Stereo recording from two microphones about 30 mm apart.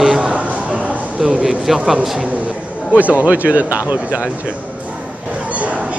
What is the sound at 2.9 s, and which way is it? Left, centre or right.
Speech, right.